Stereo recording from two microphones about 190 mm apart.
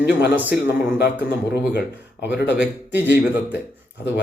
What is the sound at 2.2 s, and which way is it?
Speech, 65° left (ahead or behind).